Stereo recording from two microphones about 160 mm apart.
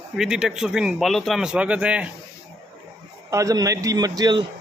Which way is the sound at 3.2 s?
20° right (ahead or behind).